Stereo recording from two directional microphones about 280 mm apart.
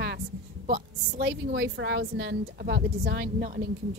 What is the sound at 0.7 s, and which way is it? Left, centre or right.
A woman's voice, right.